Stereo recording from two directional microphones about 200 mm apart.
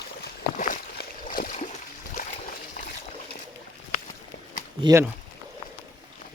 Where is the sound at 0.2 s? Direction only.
40° left (ahead or behind).